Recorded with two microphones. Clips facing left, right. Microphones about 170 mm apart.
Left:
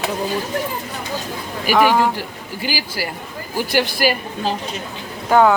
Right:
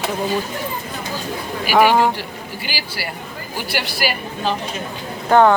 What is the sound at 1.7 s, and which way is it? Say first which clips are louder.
Speech: right 1 dB; 15° right (ahead or behind).